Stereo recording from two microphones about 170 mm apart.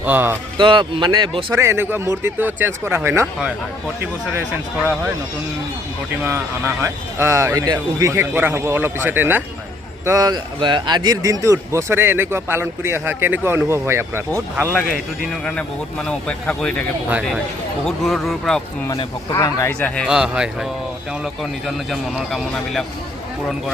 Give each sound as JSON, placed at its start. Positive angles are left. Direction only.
{"t": 0.0, "sound": "a man's voice", "side_deg": -10}
{"t": 0.5, "sound": "speech", "side_deg": -30}
{"t": 1.5, "sound": "a man's voice", "side_deg": -15}
{"t": 6.2, "sound": "a man's voice", "side_deg": -15}
{"t": 10.1, "sound": "a man's voice", "side_deg": -25}
{"t": 15.4, "sound": "speech", "side_deg": 5}
{"t": 17.8, "sound": "speech", "side_deg": 0}
{"t": 19.3, "sound": "speech", "side_deg": 15}
{"t": 20.1, "sound": "speech", "side_deg": -5}
{"t": 21.7, "sound": "speech", "side_deg": 0}